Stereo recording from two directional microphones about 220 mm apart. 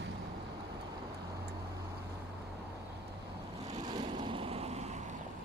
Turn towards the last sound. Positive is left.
turn(degrees=-30)  # may be behind; listen again after turning